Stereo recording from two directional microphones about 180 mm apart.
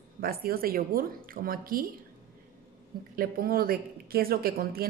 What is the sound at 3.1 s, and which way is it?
Speech, 55° right (ahead or behind).